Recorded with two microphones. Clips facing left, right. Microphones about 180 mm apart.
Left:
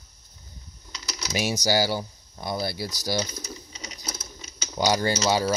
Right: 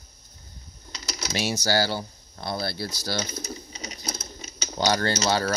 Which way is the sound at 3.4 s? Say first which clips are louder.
Right 3 dB; 50° right (ahead or behind).